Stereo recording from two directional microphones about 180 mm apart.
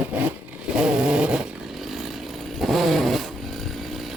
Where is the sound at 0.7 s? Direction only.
5° right (ahead or behind).